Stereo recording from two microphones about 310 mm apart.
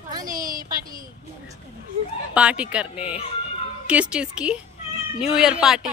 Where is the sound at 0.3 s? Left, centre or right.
Right.